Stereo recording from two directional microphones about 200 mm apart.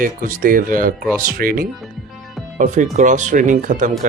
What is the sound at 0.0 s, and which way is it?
Speech, 45° right (ahead or behind).